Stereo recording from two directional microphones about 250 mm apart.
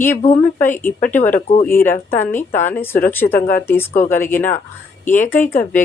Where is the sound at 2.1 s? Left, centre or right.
Centre.